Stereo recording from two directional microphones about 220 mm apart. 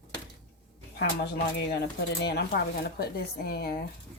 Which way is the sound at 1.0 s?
45° left (ahead or behind).